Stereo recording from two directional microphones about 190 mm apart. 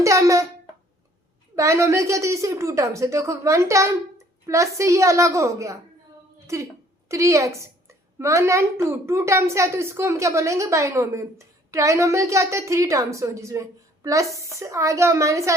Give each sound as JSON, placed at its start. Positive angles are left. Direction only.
{"t": 0.0, "sound": "a child's voice", "side_deg": -15}
{"t": 1.5, "sound": "a child's voice", "side_deg": -15}
{"t": 7.1, "sound": "a child's voice", "side_deg": -15}